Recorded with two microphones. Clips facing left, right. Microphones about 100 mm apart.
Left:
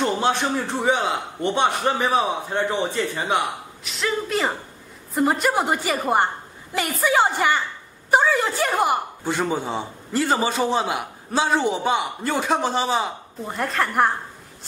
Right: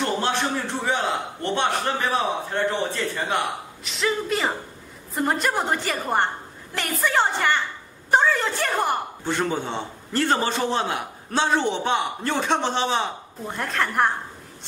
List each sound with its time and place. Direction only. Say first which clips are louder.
0.0 s a man's voice: left 3 dB; 15° left (ahead or behind)
3.8 s a woman's voice: even; centre (ahead or behind)